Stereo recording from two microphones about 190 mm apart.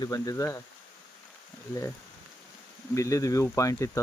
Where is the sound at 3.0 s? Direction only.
15° left (ahead or behind).